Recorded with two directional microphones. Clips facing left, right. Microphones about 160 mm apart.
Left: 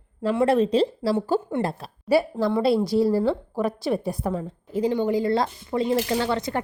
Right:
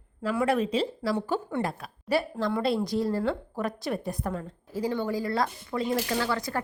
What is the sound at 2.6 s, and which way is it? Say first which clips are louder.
A woman's voice: left 8 dB; 5° left (ahead or behind).